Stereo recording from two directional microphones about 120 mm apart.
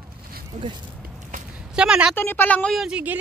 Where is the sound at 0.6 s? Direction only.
75° right (ahead or behind).